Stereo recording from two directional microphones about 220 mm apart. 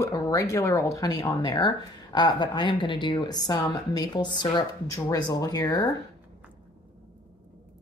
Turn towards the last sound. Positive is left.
turn(degrees=15)  # may be behind; listen again after turning